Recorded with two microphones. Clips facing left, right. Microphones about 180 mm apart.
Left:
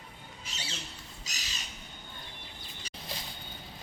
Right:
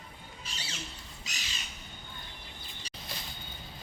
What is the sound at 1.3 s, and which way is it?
Squawk, 40° left (ahead or behind).